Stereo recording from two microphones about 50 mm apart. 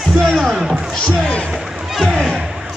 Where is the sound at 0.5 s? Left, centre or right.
Centre.